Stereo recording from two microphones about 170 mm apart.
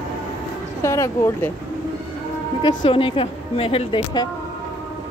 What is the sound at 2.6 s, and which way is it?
Speech, 30° left (ahead or behind).